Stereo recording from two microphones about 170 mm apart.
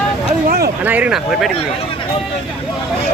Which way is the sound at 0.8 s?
10° right (ahead or behind).